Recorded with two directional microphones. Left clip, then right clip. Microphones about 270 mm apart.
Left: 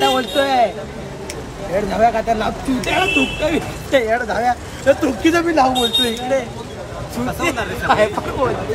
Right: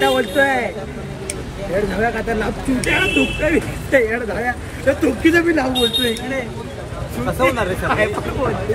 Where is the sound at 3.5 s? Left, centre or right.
Left.